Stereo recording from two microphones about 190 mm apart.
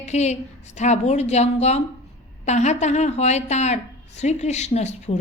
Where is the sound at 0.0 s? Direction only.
35° left (ahead or behind).